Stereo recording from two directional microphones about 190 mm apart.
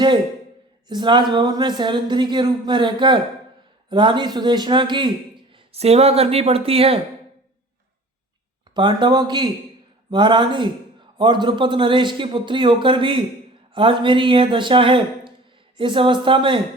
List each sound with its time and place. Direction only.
0.9 s speech: 25° right (ahead or behind)
8.7 s speech: 25° right (ahead or behind)